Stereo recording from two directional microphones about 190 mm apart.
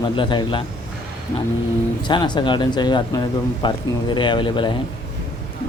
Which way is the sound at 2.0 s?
25° left (ahead or behind).